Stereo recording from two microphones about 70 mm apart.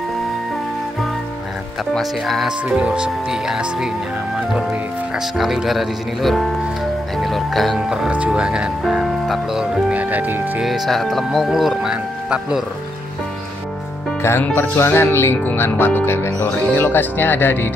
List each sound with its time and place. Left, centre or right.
2.0 s speech: centre
2.7 s speech: centre
5.1 s speech: centre
8.3 s speech: centre
9.9 s speech: right
10.6 s speech: centre
14.4 s speech: left